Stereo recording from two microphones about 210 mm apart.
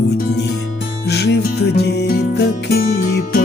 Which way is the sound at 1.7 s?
50° left (ahead or behind).